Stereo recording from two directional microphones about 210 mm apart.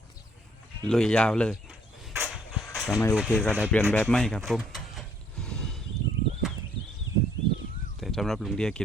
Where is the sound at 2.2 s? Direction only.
Centre (ahead or behind).